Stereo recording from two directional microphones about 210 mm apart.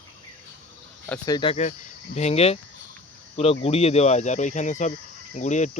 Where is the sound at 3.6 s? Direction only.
30° left (ahead or behind).